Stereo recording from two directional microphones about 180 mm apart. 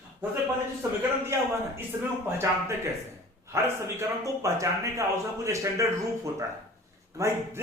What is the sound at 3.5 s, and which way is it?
A man's voice, 15° right (ahead or behind).